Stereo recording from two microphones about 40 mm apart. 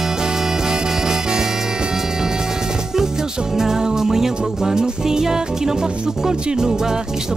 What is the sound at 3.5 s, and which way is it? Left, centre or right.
Music, centre.